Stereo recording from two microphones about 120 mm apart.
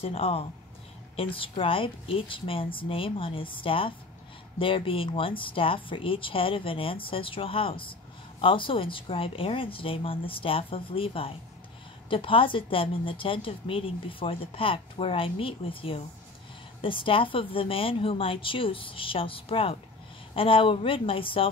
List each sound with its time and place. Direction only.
0.0 s a woman's voice: 55° left (ahead or behind)